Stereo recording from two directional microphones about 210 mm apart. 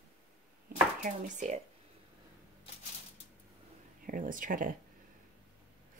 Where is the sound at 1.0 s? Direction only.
35° right (ahead or behind).